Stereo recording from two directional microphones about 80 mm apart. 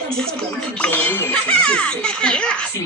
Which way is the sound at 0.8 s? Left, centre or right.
Left.